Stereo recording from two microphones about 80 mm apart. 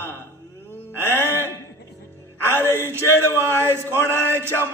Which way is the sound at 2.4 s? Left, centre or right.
Right.